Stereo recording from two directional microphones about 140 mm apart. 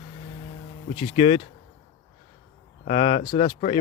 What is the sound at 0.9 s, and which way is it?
Speech, 40° left (ahead or behind).